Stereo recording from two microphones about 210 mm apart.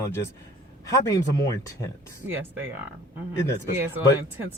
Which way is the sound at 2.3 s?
10° right (ahead or behind).